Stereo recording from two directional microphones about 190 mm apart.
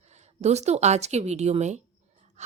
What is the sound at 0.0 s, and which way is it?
A woman's voice, 35° right (ahead or behind).